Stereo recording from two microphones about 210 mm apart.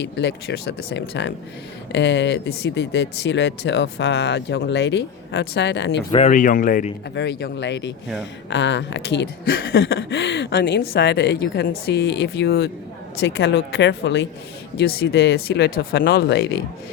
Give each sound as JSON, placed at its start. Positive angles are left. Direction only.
{"t": 0.0, "sound": "speech", "side_deg": 55}
{"t": 6.1, "sound": "speech", "side_deg": 30}
{"t": 7.2, "sound": "speech", "side_deg": 55}